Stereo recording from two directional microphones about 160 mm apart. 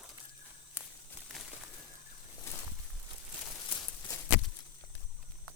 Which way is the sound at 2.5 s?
15° left (ahead or behind).